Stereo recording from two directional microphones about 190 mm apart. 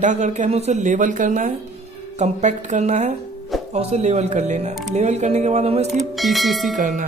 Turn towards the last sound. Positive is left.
turn(degrees=-40)  # may be behind; listen again after turning